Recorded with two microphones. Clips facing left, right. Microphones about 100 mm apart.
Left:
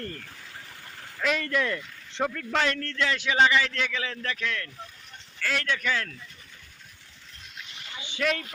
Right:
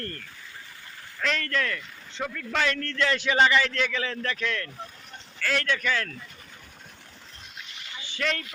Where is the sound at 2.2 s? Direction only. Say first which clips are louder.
Left 4 dB; 40° left (ahead or behind).